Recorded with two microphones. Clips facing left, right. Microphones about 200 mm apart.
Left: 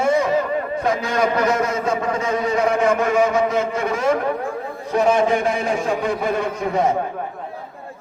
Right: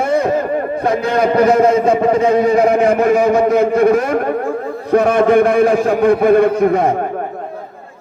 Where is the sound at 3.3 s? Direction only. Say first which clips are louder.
Right 8 dB; 60° right (ahead or behind).